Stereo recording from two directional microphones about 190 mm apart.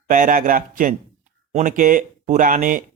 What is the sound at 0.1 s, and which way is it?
Speech, 45° right (ahead or behind).